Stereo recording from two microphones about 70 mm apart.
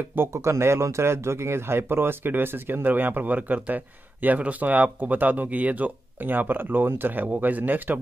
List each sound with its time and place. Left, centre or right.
0.3 s speech: right